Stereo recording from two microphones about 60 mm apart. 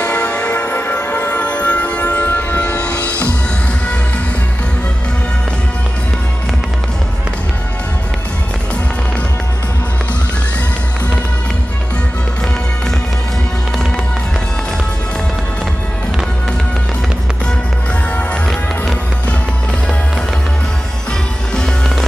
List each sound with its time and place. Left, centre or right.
0.0 s church bell: left
1.3 s music: left